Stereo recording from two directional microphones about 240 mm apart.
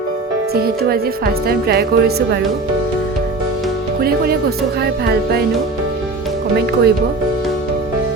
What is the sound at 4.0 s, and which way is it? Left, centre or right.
Speech, right.